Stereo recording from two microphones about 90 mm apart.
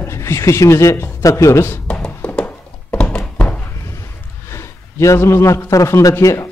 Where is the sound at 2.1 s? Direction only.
20° left (ahead or behind).